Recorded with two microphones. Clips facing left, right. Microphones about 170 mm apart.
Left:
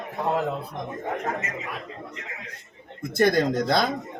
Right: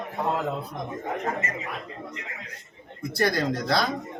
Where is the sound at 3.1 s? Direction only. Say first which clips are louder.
Left 4 dB; 20° left (ahead or behind).